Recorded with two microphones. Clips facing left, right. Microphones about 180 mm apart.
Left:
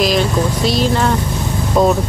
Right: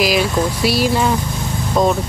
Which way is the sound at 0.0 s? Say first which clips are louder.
Left 1 dB; 5° right (ahead or behind).